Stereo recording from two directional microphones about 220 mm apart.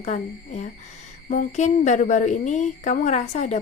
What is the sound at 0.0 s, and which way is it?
Speech, 30° left (ahead or behind).